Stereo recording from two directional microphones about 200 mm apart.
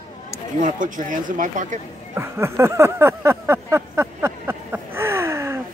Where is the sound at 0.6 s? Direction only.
40° right (ahead or behind).